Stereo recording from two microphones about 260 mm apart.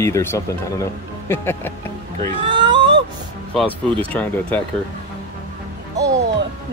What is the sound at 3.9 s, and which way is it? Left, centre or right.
Speech, centre.